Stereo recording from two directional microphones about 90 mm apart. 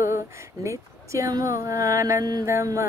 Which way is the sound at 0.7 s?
35° right (ahead or behind).